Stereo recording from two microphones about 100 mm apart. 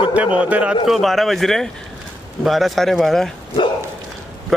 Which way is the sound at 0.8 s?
Centre (ahead or behind).